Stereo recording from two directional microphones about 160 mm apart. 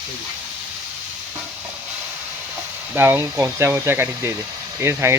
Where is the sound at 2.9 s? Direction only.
15° right (ahead or behind).